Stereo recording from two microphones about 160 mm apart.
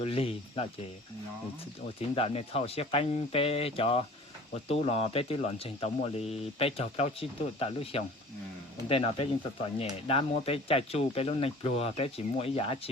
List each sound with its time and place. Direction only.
0.0 s speech: 35° left (ahead or behind)
2.0 s speech: 40° left (ahead or behind)